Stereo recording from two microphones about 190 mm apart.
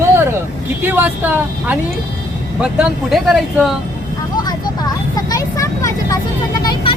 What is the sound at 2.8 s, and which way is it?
Speech, centre (ahead or behind).